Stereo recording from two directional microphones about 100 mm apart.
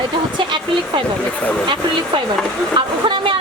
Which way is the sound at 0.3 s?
55° right (ahead or behind).